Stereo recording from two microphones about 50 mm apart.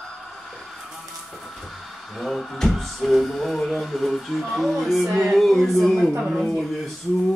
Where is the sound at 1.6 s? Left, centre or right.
Centre.